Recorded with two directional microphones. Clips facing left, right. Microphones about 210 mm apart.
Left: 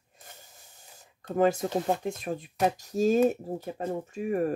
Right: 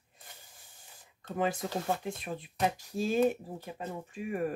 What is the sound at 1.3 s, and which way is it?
Speech, 45° left (ahead or behind).